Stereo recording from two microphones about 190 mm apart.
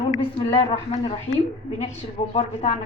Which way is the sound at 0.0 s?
25° left (ahead or behind).